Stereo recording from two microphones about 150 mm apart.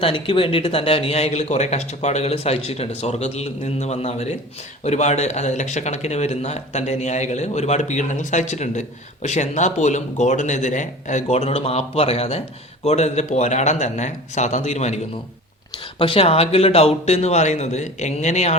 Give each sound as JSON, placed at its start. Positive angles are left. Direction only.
{"t": 0.0, "sound": "speech", "side_deg": 35}
{"t": 16.0, "sound": "speech", "side_deg": 40}